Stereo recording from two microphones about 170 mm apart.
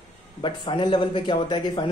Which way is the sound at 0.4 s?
30° left (ahead or behind).